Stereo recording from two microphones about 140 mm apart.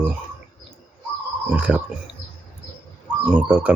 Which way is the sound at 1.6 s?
10° right (ahead or behind).